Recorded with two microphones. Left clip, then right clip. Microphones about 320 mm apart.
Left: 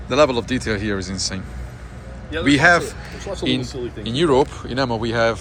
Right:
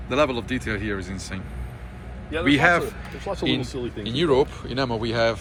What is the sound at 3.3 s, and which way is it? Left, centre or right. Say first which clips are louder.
Speech: even; right.